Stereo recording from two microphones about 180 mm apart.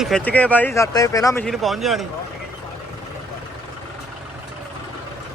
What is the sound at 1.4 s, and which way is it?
Speech, centre (ahead or behind).